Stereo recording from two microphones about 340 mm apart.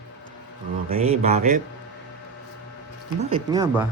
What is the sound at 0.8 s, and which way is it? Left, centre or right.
Speech, centre.